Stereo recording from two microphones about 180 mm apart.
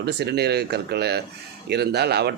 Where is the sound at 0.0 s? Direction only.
65° right (ahead or behind).